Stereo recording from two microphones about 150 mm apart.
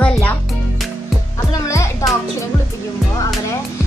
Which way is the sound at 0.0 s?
10° left (ahead or behind).